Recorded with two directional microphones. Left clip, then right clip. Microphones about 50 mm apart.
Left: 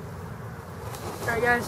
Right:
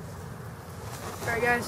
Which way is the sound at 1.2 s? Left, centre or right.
Centre.